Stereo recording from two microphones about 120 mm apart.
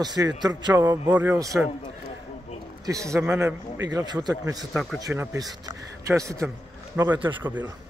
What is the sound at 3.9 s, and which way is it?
Speech, 35° right (ahead or behind).